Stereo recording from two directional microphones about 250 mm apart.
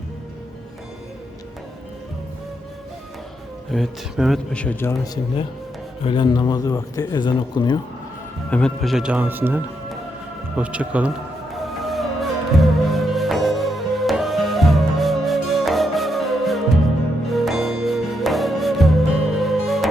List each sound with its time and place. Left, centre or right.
3.7 s a man's voice: centre
8.4 s a man's voice: centre
11.8 s music: centre